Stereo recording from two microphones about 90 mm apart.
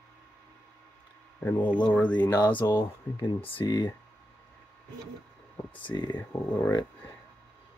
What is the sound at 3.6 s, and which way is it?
Speech, 50° left (ahead or behind).